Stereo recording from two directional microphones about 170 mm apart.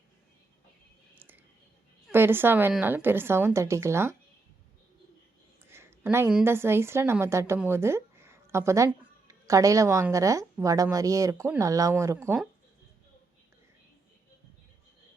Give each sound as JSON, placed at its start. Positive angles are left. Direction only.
{"t": 1.1, "sound": "a sound", "side_deg": -10}
{"t": 2.1, "sound": "speech", "side_deg": -15}
{"t": 5.7, "sound": "a woman's voice", "side_deg": -15}